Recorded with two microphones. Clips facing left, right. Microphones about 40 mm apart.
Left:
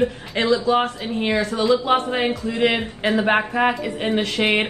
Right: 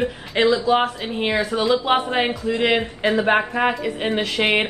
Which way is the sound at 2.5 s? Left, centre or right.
Centre.